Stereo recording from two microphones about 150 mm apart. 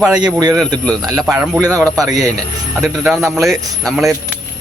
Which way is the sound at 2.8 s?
Centre (ahead or behind).